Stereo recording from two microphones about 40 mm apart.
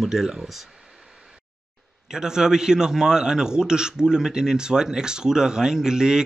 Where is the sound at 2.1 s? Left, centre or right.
Centre.